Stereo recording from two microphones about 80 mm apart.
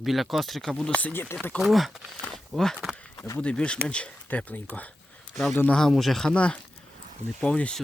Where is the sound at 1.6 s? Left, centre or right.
Centre.